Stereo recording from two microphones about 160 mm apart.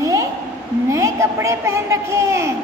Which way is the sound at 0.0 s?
20° right (ahead or behind).